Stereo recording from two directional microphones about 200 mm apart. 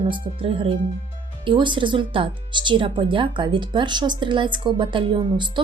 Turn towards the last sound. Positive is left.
turn(degrees=-25)  # may be behind; listen again after turning